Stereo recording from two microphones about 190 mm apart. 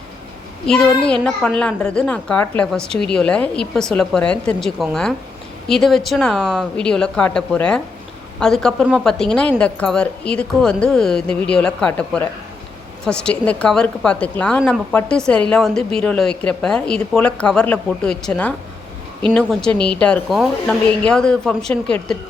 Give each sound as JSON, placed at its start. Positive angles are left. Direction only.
{"t": 0.7, "sound": "a child's voice", "side_deg": 5}